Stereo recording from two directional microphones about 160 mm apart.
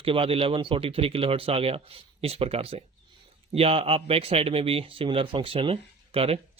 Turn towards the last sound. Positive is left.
turn(degrees=-35)  # may be behind; listen again after turning